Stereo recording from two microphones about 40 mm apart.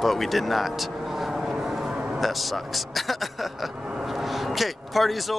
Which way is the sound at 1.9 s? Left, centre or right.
Right.